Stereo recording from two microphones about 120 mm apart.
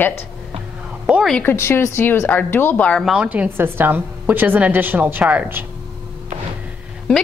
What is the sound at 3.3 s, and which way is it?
A woman's voice, 15° right (ahead or behind).